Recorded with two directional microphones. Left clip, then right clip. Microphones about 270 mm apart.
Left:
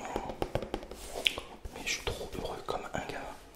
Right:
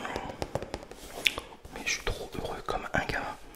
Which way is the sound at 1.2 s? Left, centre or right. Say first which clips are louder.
Right 3 dB; centre.